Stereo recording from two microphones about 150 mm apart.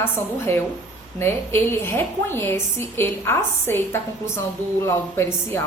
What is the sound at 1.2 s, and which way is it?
A woman's voice, 15° left (ahead or behind).